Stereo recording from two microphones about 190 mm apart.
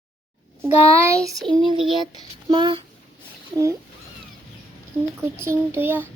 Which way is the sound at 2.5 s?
25° right (ahead or behind).